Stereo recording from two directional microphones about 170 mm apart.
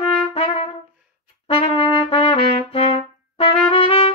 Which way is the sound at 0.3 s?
35° left (ahead or behind).